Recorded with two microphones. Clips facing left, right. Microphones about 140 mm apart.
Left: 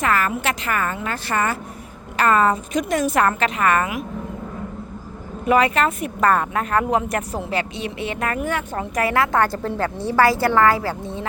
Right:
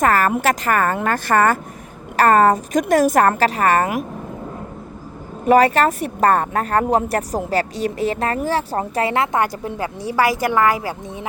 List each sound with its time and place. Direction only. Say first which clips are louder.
0.0 s a woman's voice: right 5 dB; 45° right (ahead or behind)
5.5 s speech: right 4 dB; 40° right (ahead or behind); by 11.3 s 15° right (ahead or behind)